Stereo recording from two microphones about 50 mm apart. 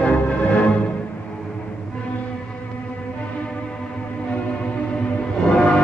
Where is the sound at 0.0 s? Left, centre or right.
Left.